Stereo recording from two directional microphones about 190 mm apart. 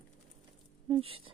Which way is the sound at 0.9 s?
30° right (ahead or behind).